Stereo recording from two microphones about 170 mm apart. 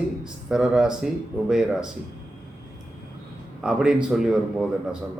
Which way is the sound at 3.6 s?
5° right (ahead or behind).